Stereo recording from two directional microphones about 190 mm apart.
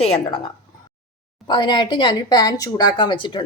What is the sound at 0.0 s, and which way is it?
Speech, 30° left (ahead or behind).